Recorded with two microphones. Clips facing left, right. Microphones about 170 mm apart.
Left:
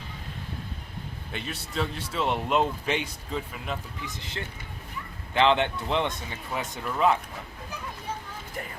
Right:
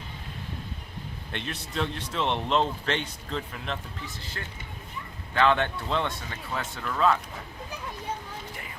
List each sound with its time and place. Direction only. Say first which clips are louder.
1.3 s speech: even; 5° left (ahead or behind)
4.2 s speech: left 2 dB; 20° left (ahead or behind)